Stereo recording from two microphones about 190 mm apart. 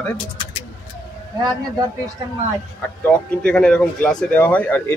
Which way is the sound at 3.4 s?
5° left (ahead or behind).